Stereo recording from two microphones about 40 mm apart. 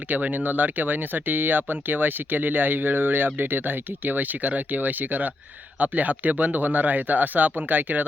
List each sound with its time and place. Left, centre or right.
0.1 s speech: right